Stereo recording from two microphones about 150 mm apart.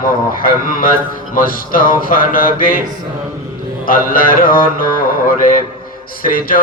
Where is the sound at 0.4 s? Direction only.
70° left (ahead or behind).